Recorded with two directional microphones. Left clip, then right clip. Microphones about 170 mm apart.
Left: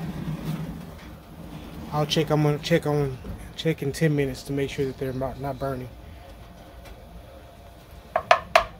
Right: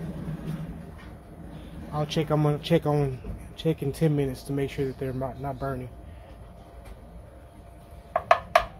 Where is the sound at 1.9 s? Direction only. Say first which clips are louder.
Left 4 dB; 5° left (ahead or behind).